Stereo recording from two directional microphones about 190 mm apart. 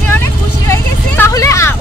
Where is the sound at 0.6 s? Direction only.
15° left (ahead or behind).